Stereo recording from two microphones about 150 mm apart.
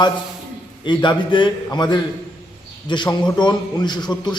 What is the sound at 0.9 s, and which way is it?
A man's voice, 30° left (ahead or behind).